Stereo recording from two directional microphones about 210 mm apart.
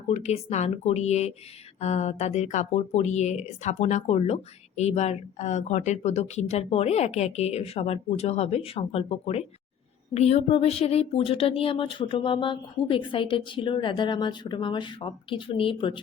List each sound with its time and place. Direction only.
0.1 s speech: 30° left (ahead or behind)